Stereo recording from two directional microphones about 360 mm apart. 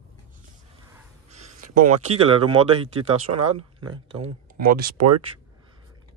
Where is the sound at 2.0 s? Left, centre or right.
Centre.